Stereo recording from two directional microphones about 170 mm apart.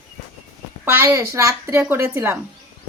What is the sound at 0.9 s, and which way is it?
A woman's voice, 15° right (ahead or behind).